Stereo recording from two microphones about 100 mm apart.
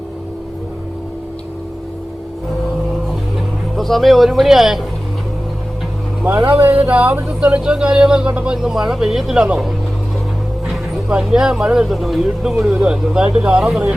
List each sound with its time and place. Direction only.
3.8 s speech: centre (ahead or behind)
6.2 s speech: 20° right (ahead or behind)
11.2 s speech: 5° right (ahead or behind)